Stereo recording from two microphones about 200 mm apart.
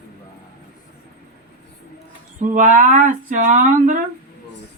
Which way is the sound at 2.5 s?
40° right (ahead or behind).